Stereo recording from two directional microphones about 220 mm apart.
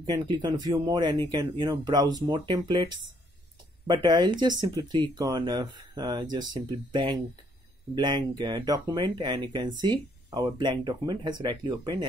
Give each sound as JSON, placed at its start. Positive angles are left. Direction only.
{"t": 0.0, "sound": "speech", "side_deg": -20}